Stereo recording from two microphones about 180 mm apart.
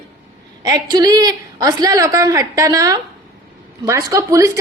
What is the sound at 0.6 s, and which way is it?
A woman's voice, 20° right (ahead or behind).